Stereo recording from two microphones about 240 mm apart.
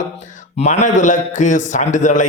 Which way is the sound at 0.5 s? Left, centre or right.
Left.